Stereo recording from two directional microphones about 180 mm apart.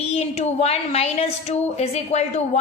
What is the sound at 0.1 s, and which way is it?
A woman's voice, 35° left (ahead or behind).